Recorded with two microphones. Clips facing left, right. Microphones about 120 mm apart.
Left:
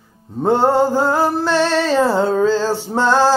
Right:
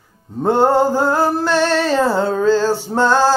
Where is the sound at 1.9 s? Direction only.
15° left (ahead or behind).